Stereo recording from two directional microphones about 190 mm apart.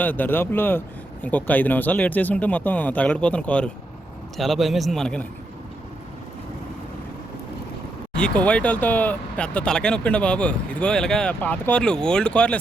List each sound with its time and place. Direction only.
0.0 s speech: 10° left (ahead or behind)
8.1 s speech: 5° left (ahead or behind)